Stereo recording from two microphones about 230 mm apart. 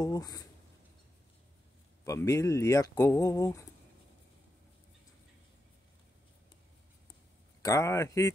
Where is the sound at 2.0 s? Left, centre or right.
Centre.